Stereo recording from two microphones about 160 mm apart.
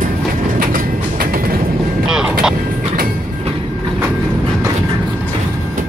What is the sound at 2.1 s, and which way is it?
Vehicle, 5° right (ahead or behind).